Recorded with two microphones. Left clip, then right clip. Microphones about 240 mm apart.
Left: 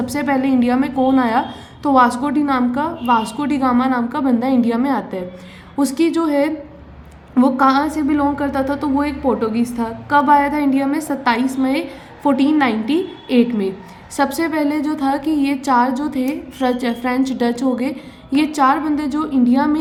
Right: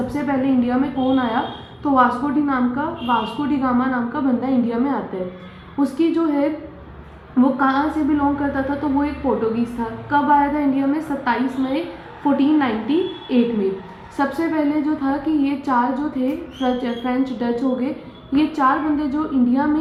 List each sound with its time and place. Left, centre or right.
0.1 s a woman's voice: left
10.1 s a woman's voice: left